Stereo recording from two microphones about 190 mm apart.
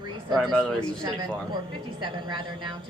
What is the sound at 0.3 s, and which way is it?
Speech, centre (ahead or behind).